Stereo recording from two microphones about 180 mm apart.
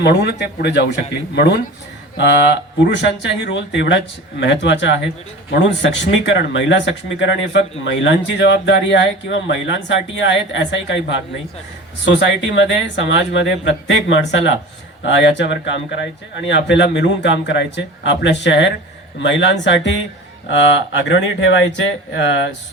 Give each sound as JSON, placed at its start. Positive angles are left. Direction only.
{"t": 0.0, "sound": "speech", "side_deg": 65}